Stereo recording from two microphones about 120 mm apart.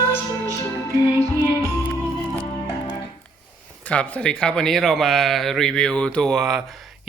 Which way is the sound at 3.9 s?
5° left (ahead or behind).